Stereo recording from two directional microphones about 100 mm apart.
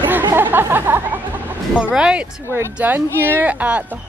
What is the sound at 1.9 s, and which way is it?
Speech, 10° right (ahead or behind).